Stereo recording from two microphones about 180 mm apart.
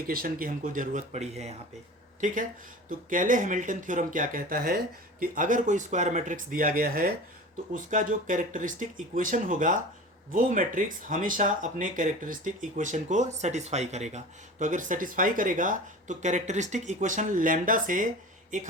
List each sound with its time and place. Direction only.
0.0 s speech: 55° right (ahead or behind)